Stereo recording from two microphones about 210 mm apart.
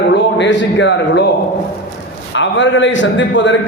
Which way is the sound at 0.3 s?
60° left (ahead or behind).